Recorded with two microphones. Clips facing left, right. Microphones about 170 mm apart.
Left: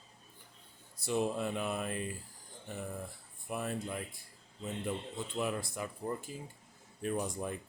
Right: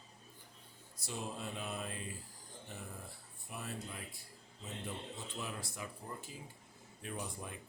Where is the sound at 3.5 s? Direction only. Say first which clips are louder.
Left 9 dB; 55° left (ahead or behind).